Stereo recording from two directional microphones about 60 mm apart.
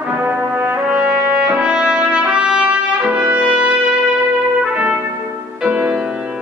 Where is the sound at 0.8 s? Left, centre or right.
Centre.